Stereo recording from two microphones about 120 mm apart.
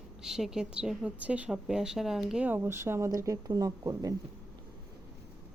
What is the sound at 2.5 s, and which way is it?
Speech, 20° right (ahead or behind).